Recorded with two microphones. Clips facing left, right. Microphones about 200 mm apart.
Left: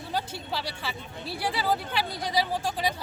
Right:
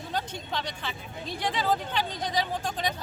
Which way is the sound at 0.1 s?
5° left (ahead or behind).